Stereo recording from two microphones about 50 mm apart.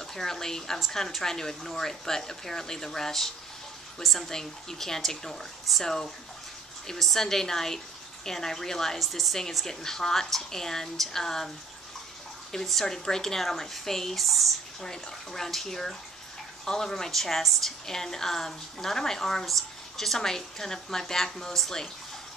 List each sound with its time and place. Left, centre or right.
0.0 s a woman's voice: centre
12.5 s speech: centre